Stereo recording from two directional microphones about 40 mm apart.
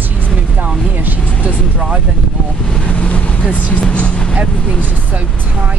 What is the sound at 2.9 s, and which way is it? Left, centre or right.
Speech, left.